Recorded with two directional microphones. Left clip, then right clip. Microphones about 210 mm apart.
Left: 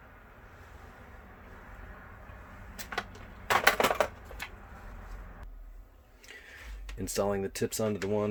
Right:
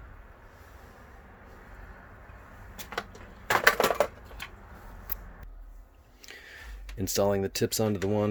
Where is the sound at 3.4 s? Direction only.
45° right (ahead or behind).